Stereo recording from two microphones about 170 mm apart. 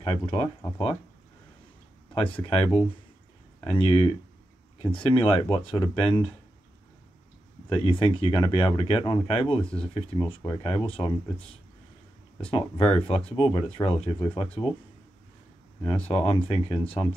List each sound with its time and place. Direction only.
0.0 s speech: 35° left (ahead or behind)
2.2 s speech: 30° left (ahead or behind)
7.8 s speech: 30° left (ahead or behind)
15.8 s speech: 30° left (ahead or behind)